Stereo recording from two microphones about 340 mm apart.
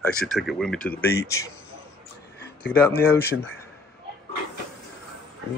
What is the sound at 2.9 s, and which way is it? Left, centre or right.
Speech, left.